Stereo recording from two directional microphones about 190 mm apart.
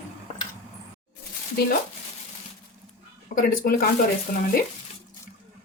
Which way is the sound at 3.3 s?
50° left (ahead or behind).